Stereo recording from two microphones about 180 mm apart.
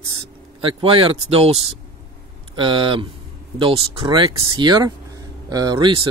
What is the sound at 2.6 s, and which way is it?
Speech, 25° right (ahead or behind).